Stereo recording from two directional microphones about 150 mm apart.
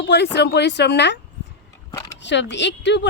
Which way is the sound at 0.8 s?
90° left.